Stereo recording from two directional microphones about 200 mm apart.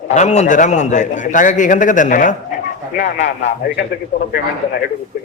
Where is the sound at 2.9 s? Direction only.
60° left (ahead or behind).